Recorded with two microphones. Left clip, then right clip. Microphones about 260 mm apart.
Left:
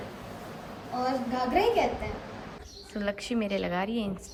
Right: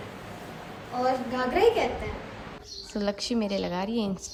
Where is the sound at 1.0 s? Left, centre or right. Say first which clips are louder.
Right 3 dB; centre.